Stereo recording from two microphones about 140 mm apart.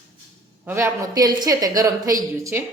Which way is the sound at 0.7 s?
20° right (ahead or behind).